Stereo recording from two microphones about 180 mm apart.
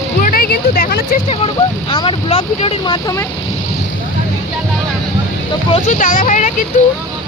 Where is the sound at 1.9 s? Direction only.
30° left (ahead or behind).